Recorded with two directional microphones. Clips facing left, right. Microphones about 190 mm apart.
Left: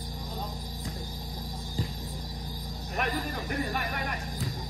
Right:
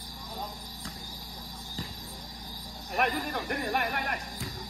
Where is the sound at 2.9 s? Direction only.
60° right (ahead or behind).